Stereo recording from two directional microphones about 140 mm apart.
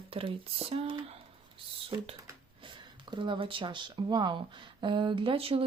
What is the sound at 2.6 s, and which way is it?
Speech, 35° right (ahead or behind).